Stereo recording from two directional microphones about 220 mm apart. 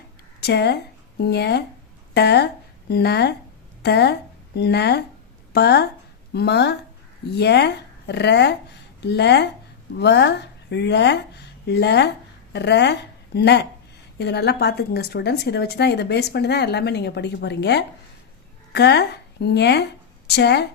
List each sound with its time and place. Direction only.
0.4 s a woman's voice: 50° left (ahead or behind)